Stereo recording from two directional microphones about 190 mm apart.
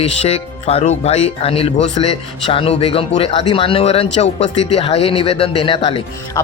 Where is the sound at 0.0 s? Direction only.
30° left (ahead or behind).